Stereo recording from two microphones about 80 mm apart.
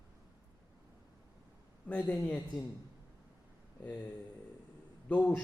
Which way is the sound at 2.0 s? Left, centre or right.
Centre.